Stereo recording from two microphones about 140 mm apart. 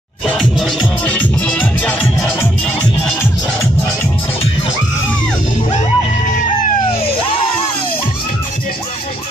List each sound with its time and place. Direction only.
0.4 s music: centre (ahead or behind)
5.7 s music: 60° left (ahead or behind)
6.9 s a sound: 90° left
7.2 s music: 40° left (ahead or behind)